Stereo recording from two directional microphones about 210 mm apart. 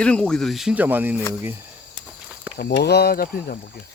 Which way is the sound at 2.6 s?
50° left (ahead or behind).